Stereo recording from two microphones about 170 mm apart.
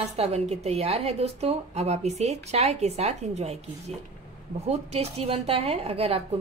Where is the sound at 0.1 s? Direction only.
40° right (ahead or behind).